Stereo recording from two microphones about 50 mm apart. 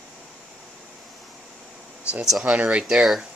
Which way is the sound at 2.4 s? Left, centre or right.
Right.